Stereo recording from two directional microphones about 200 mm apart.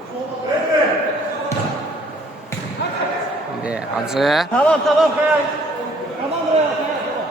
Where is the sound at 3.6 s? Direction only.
5° right (ahead or behind).